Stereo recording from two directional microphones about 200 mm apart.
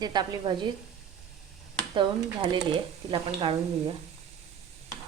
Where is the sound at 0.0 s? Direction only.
20° right (ahead or behind).